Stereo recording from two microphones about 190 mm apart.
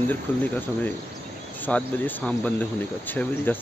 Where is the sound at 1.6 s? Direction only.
10° left (ahead or behind).